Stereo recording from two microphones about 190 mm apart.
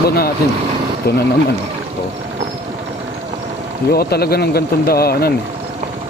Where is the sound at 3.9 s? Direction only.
55° left (ahead or behind).